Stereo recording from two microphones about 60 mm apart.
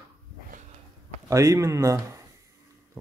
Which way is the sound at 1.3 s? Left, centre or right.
Right.